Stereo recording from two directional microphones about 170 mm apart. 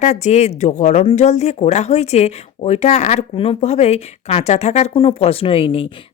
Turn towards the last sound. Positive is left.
turn(degrees=30)  # may be behind; listen again after turning